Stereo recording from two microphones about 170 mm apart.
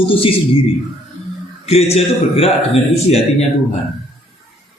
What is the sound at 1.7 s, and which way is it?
A man's voice, 40° left (ahead or behind).